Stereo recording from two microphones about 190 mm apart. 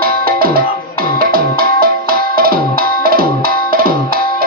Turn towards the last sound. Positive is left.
turn(degrees=-50)  # may be behind; listen again after turning